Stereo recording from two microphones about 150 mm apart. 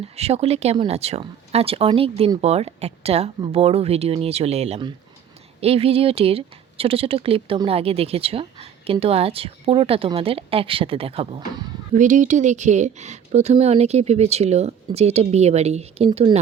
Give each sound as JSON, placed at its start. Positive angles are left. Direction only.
{"t": 0.2, "sound": "a woman's voice", "side_deg": -45}
{"t": 11.9, "sound": "a woman's voice", "side_deg": -55}